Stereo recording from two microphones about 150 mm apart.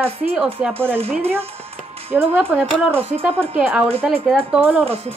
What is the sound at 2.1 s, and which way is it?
Speech, 15° right (ahead or behind).